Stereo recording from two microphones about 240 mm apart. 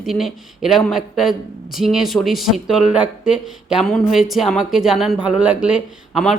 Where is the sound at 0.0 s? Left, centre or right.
Centre.